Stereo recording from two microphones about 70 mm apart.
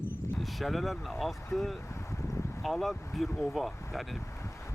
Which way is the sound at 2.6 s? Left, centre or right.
Centre.